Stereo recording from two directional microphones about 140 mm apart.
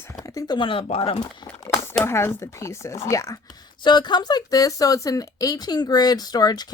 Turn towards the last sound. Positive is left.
turn(degrees=30)  # may be behind; listen again after turning